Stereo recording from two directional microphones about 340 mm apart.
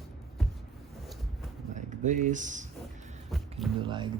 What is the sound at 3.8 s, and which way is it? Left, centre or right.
Speech, centre.